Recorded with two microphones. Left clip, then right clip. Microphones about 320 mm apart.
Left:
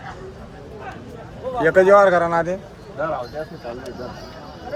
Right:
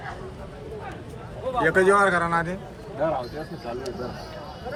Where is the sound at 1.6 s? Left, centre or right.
Left.